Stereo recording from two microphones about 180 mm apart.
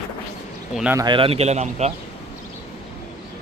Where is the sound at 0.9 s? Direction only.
25° right (ahead or behind).